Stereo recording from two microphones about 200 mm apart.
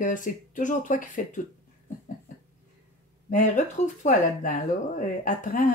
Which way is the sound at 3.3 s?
35° left (ahead or behind).